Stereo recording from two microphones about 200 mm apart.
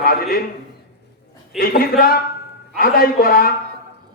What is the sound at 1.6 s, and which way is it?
A man's voice, 45° left (ahead or behind).